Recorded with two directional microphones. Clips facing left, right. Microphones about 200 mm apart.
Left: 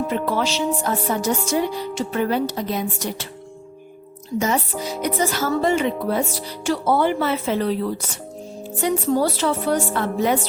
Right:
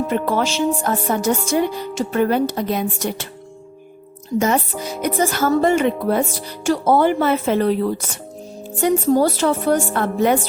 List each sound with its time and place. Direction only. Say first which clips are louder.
0.1 s speech: right 2 dB; 50° right (ahead or behind)
4.4 s speech: right 3 dB; 55° right (ahead or behind)